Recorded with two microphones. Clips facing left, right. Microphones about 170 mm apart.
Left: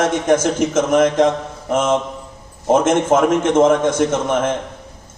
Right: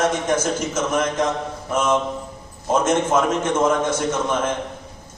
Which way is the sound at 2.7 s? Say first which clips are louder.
Left 4 dB; 55° left (ahead or behind).